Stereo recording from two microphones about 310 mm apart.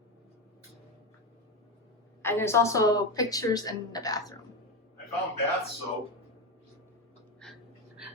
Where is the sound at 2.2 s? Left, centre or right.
Centre.